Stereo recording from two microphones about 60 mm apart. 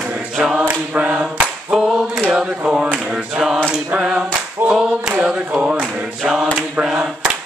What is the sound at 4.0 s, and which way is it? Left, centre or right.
Singing, centre.